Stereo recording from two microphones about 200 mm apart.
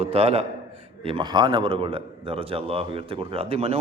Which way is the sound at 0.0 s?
30° right (ahead or behind).